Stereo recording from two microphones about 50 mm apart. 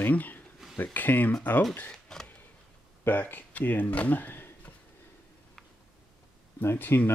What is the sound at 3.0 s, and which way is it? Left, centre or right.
Speech, left.